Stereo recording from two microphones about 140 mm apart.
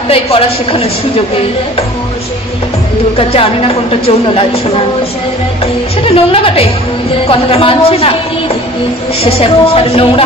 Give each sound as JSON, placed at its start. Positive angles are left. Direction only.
{"t": 0.1, "sound": "a woman's voice", "side_deg": 40}
{"t": 3.2, "sound": "a woman's voice", "side_deg": 45}
{"t": 6.0, "sound": "a woman's voice", "side_deg": 45}
{"t": 9.2, "sound": "a woman's voice", "side_deg": 45}